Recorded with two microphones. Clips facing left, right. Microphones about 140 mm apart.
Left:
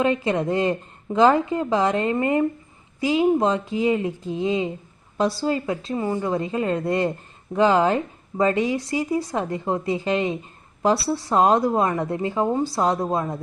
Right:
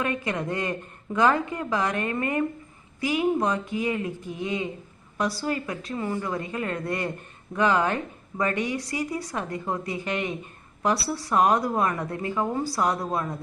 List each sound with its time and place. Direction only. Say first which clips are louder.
0.0 s speech: left 7 dB; 25° left (ahead or behind)